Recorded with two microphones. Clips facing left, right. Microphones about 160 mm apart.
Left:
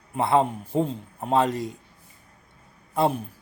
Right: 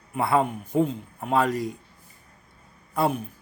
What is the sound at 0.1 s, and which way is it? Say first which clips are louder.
Speech: left 1 dB; 25° left (ahead or behind).